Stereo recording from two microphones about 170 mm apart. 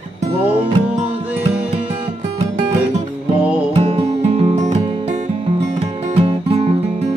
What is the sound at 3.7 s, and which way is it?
Music, 35° right (ahead or behind).